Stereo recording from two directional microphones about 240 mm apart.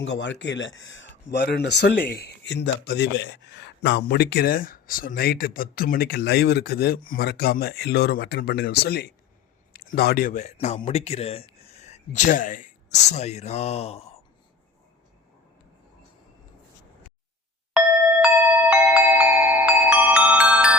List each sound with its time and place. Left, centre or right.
0.0 s speech: left
18.7 s music: centre